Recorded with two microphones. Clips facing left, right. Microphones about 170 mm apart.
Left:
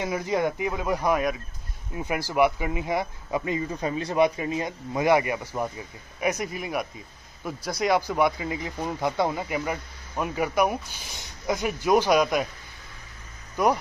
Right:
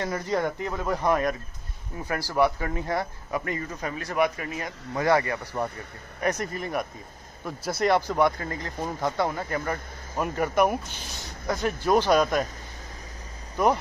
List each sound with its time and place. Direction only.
0.0 s speech: 10° left (ahead or behind)
2.0 s speech: 15° left (ahead or behind)
6.2 s speech: 5° left (ahead or behind)